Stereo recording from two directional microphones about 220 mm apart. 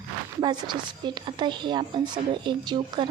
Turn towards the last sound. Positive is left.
turn(degrees=-20)  # may be behind; listen again after turning